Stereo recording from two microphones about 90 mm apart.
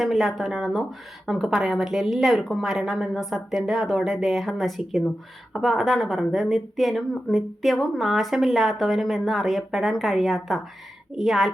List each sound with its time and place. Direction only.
0.0 s a woman's voice: centre (ahead or behind)